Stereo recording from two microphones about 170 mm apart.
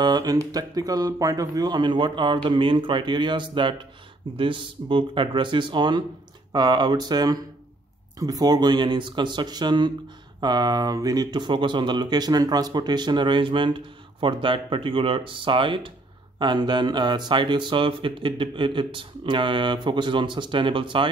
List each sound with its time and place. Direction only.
0.0 s speech: 25° right (ahead or behind)